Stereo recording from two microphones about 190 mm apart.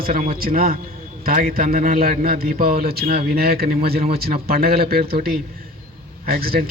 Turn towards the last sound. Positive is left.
turn(degrees=-55)  # may be behind; listen again after turning